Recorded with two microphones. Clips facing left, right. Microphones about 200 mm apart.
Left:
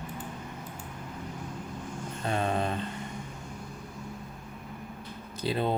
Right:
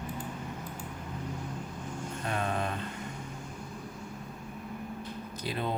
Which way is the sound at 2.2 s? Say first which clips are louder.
Left 4 dB; 30° left (ahead or behind).